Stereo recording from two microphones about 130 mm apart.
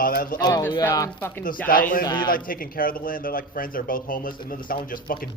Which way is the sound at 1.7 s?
90° left.